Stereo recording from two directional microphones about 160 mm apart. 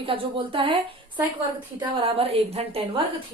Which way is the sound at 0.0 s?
35° right (ahead or behind).